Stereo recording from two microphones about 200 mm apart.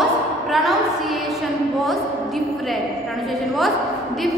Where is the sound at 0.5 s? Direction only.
Centre (ahead or behind).